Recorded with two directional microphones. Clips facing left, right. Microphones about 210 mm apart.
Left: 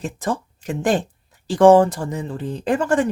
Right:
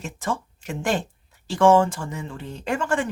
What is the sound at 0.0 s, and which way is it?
Speech, 35° left (ahead or behind).